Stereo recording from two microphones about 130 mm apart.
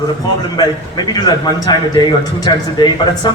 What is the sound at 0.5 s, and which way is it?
A man's voice, 35° left (ahead or behind).